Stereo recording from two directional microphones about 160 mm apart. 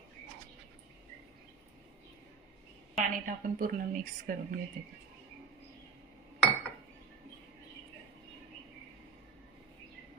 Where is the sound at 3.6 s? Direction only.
60° right (ahead or behind).